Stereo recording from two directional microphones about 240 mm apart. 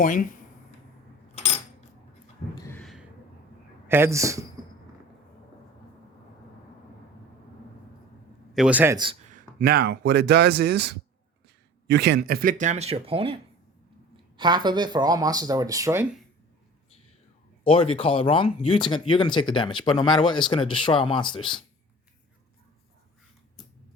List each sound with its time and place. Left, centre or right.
0.0 s speech: left
2.6 s a sound: centre
3.8 s speech: centre
8.5 s speech: centre
9.3 s speech: right; by 16.0 s centre
17.6 s speech: left